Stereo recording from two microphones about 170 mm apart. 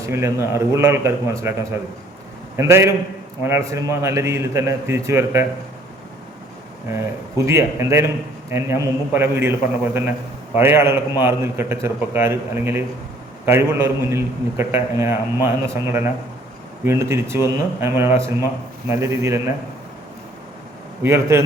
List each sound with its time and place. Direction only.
0.0 s a man's voice: 15° right (ahead or behind)
7.3 s a man's voice: 15° right (ahead or behind)
21.0 s a man's voice: 15° right (ahead or behind)